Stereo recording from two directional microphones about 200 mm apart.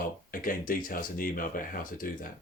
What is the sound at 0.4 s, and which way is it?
Speech, 45° left (ahead or behind).